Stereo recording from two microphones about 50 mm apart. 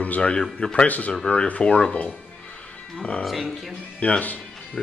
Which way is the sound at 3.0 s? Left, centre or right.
Left.